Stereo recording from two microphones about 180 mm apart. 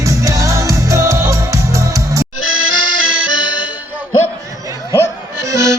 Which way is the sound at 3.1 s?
90° right.